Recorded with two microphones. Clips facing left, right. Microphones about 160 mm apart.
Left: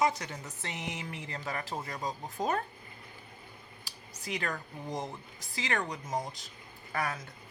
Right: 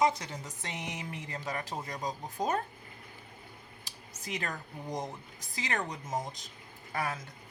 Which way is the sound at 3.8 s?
20° right (ahead or behind).